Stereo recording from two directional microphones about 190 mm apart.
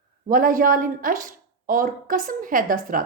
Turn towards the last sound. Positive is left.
turn(degrees=-45)  # may be behind; listen again after turning